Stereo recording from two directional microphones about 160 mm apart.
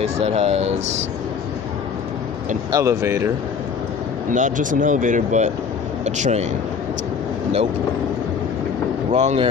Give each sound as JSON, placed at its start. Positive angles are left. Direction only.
{"t": 0.0, "sound": "speech", "side_deg": -40}
{"t": 2.7, "sound": "speech", "side_deg": -20}
{"t": 4.3, "sound": "speech", "side_deg": -55}
{"t": 9.1, "sound": "speech", "side_deg": -45}